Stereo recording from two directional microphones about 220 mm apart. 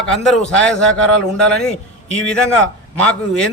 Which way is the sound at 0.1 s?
Centre (ahead or behind).